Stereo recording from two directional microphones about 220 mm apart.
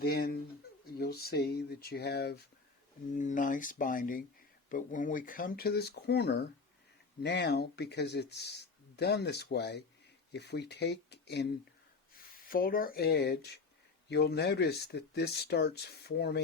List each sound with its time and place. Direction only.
0.0 s speech: 45° left (ahead or behind)
3.2 s speech: 35° left (ahead or behind)